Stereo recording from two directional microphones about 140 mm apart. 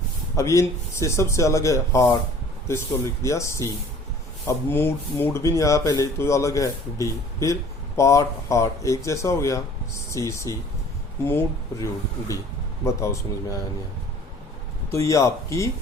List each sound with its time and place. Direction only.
0.3 s speech: 20° left (ahead or behind)
3.2 s speech: 20° left (ahead or behind)
14.9 s speech: 20° left (ahead or behind)